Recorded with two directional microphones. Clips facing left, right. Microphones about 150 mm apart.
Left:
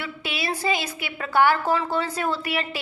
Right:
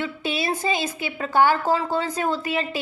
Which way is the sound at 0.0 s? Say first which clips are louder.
Right 4 dB; 20° right (ahead or behind).